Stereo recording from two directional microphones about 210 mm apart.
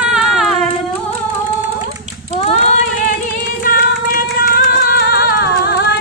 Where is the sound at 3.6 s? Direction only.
40° left (ahead or behind).